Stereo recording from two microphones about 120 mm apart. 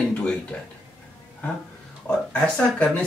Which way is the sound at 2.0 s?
10° left (ahead or behind).